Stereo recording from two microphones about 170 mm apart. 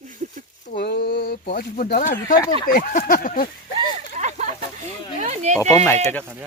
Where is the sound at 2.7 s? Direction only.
55° left (ahead or behind).